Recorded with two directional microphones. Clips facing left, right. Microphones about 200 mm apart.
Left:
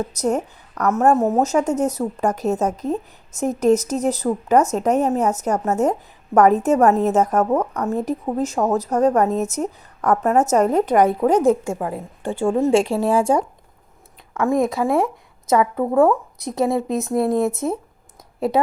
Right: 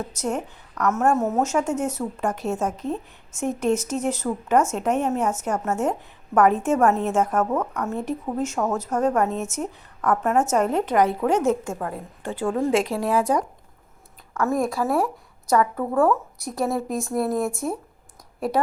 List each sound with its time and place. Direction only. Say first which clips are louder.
0.1 s a woman's voice: left 6 dB; 40° left (ahead or behind)
11.2 s a woman's voice: left 5 dB; 35° left (ahead or behind)
11.6 s a woman's voice: left 5 dB; 10° left (ahead or behind)
11.9 s speech: left 5 dB; 25° left (ahead or behind)
14.5 s a woman's voice: left 4 dB; centre (ahead or behind)
15.4 s speech: left 3 dB; 20° left (ahead or behind)
17.2 s a woman's voice: left 6 dB; centre (ahead or behind)
18.3 s a woman's voice: left 4 dB; 25° left (ahead or behind)